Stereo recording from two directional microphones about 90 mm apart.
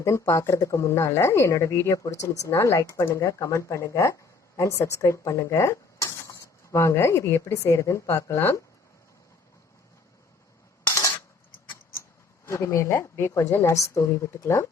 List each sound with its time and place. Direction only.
0.0 s speech: 35° left (ahead or behind)
10.8 s coin: 40° left (ahead or behind)
12.5 s speech: 35° left (ahead or behind)